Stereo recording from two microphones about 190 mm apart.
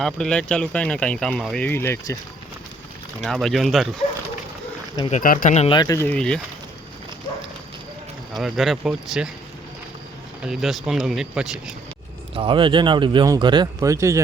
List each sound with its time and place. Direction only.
0.0 s speech: 5° left (ahead or behind)
3.2 s speech: centre (ahead or behind)
5.1 s speech: 45° left (ahead or behind)
5.7 s speech: 20° left (ahead or behind)
6.1 s speech: 5° left (ahead or behind)
8.4 s speech: centre (ahead or behind)
10.4 s speech: centre (ahead or behind)
12.3 s speech: 25° right (ahead or behind)